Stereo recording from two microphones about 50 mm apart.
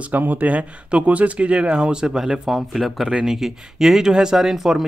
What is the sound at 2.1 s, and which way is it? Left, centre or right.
Speech, centre.